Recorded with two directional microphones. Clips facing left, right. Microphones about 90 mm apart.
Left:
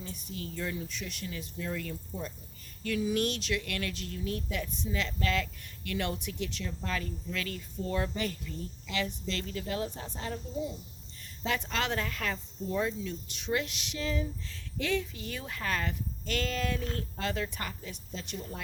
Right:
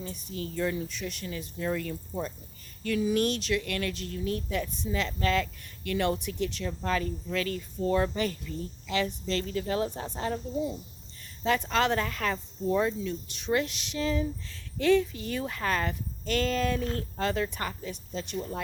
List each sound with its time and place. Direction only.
0.0 s speech: 35° right (ahead or behind)